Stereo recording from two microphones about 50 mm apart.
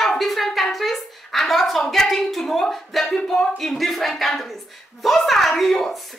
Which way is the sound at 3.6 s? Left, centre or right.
Centre.